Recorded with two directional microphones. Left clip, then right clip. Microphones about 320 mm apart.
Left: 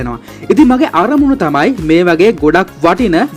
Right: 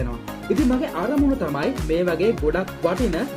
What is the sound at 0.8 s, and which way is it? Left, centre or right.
Speech, left.